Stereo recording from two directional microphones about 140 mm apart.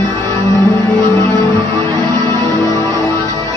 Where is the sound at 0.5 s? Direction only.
15° left (ahead or behind).